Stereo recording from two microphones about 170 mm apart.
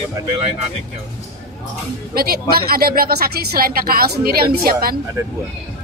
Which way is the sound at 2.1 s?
65° right (ahead or behind).